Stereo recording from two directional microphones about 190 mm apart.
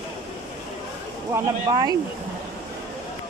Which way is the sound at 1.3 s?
20° right (ahead or behind).